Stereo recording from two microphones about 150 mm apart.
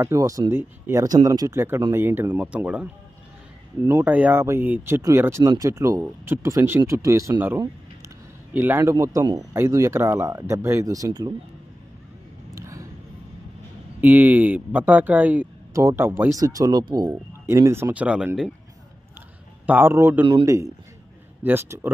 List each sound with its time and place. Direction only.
0.0 s speech: 20° right (ahead or behind)
12.5 s a sound: 20° right (ahead or behind)
14.0 s speech: 10° right (ahead or behind)
19.6 s speech: 15° right (ahead or behind)